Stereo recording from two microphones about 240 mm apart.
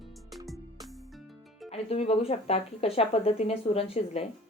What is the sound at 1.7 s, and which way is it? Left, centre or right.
Speech, left.